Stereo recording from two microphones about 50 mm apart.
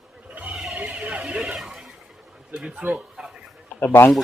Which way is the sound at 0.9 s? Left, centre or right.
Right.